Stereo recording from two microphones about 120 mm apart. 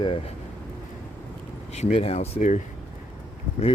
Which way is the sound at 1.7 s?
65° left (ahead or behind).